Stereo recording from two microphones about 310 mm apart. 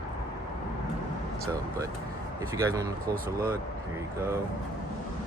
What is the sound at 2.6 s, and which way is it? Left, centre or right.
Speech, centre.